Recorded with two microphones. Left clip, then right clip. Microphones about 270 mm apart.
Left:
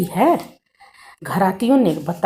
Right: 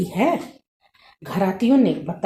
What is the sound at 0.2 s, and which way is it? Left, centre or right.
Speech, left.